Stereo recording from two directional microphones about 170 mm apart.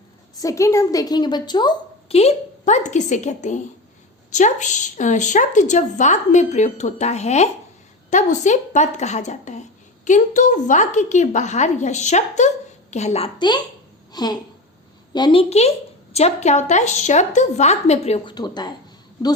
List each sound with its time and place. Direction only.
0.3 s a woman's voice: 20° left (ahead or behind)
2.1 s a woman's voice: 40° left (ahead or behind)
18.3 s a woman's voice: 25° left (ahead or behind)